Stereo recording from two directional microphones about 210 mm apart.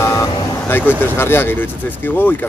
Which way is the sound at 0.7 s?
10° left (ahead or behind).